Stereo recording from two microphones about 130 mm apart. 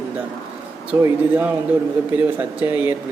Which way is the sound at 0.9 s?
15° right (ahead or behind).